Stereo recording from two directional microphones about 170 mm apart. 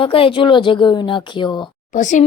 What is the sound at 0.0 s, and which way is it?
A woman's voice, 30° left (ahead or behind).